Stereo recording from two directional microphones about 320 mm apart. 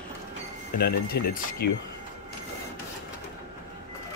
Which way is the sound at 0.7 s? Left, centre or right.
Left.